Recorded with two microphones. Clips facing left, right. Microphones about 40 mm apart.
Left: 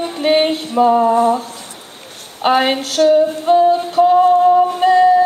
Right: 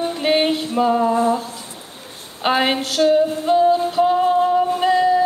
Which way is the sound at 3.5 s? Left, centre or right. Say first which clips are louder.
Left 4 dB; centre.